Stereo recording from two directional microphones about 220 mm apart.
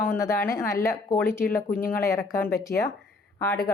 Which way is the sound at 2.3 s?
10° left (ahead or behind).